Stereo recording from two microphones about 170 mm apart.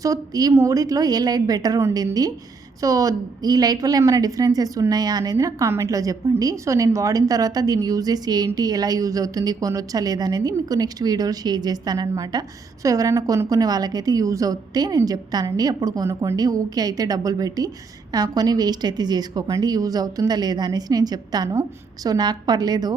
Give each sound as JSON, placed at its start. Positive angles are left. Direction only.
{"t": 0.0, "sound": "a woman's voice", "side_deg": -20}